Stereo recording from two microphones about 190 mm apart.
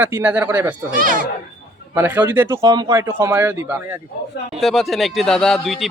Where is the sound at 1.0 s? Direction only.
45° right (ahead or behind).